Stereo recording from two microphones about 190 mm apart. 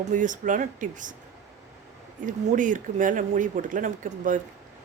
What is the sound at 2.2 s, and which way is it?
Speech, 40° right (ahead or behind).